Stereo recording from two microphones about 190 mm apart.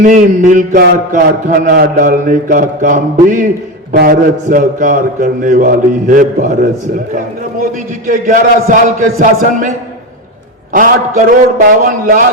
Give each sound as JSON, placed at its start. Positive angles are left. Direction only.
{"t": 0.0, "sound": "speech", "side_deg": -40}